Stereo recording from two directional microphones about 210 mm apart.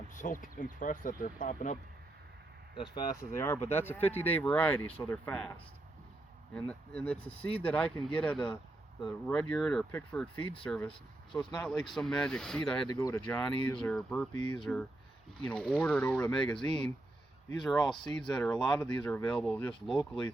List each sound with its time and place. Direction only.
0.1 s speech: 40° left (ahead or behind)
2.7 s speech: 20° left (ahead or behind); by 12.9 s 5° left (ahead or behind)
12.9 s speech: 15° left (ahead or behind)
13.7 s speech: 5° left (ahead or behind)
14.3 s speech: 20° left (ahead or behind)
14.6 s speech: 5° left (ahead or behind)